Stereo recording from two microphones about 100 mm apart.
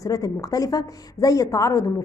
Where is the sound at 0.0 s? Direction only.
35° left (ahead or behind).